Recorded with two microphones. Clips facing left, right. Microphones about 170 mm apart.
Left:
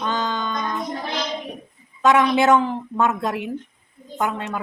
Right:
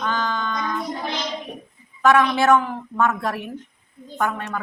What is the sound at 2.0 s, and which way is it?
Speech, 20° left (ahead or behind).